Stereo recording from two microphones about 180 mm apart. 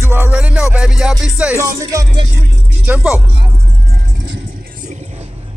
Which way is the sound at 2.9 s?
5° right (ahead or behind).